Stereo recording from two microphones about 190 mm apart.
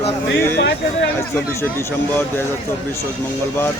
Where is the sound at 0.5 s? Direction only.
55° left (ahead or behind).